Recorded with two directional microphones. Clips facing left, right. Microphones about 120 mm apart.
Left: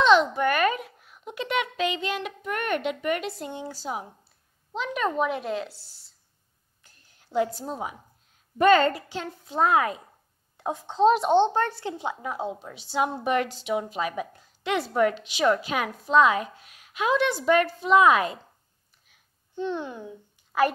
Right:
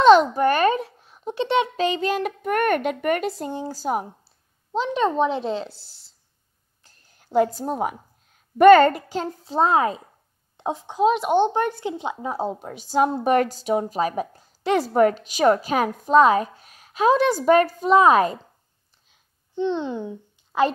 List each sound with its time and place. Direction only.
0.0 s a child's voice: 40° right (ahead or behind)
4.7 s a child's voice: 30° right (ahead or behind)
7.2 s a woman's voice: 50° right (ahead or behind)
9.1 s a child's voice: 35° right (ahead or behind)
10.9 s a child's voice: 5° right (ahead or behind)
12.3 s a woman's voice: 35° right (ahead or behind)
19.0 s babbling: 20° right (ahead or behind)